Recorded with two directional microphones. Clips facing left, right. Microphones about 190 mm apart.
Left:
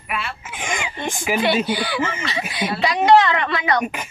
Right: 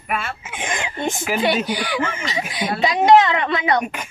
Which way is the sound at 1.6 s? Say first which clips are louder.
Left 1 dB; 15° right (ahead or behind).